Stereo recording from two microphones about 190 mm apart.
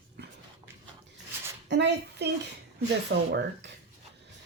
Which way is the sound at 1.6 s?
65° right (ahead or behind).